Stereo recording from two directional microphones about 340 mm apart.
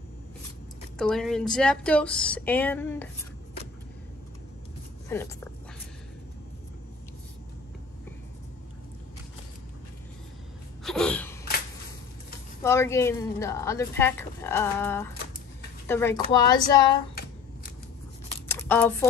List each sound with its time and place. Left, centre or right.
0.9 s speech: centre
5.1 s speech: centre
10.8 s a sound: centre
12.6 s speech: centre
17.1 s shuffling cards: left
18.5 s a sound: centre